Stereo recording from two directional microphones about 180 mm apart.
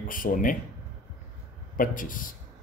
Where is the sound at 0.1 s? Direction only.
50° left (ahead or behind).